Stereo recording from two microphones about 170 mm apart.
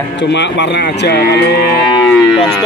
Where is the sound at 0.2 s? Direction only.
90° left.